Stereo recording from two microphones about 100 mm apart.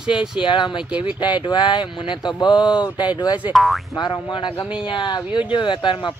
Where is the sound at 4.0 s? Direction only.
50° left (ahead or behind).